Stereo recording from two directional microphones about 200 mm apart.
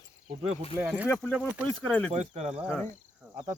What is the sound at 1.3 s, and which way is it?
Speech, 5° right (ahead or behind).